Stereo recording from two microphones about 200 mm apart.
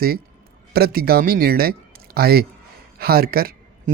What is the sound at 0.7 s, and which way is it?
Speech, 50° right (ahead or behind).